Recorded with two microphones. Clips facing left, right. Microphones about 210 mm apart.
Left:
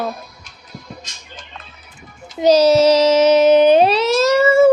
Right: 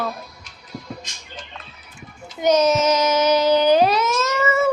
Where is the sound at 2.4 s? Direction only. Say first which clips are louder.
Left 6 dB; 30° left (ahead or behind).